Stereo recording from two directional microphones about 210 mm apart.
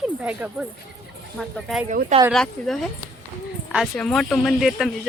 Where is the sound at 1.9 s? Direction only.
35° right (ahead or behind).